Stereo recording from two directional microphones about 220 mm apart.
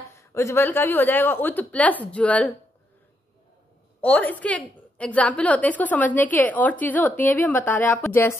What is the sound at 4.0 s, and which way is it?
A woman's voice, 5° left (ahead or behind).